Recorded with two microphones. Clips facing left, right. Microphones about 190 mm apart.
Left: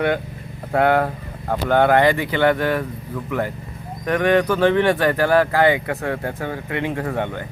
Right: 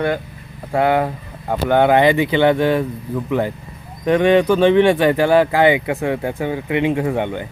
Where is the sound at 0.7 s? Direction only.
Centre (ahead or behind); by 7.4 s 20° right (ahead or behind).